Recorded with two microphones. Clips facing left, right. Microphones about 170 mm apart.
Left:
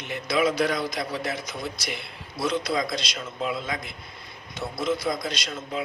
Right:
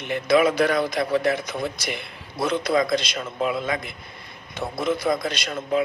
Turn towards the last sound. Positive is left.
turn(degrees=-55)  # may be behind; listen again after turning